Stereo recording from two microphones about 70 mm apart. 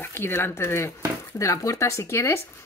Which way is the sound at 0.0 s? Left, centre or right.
Left.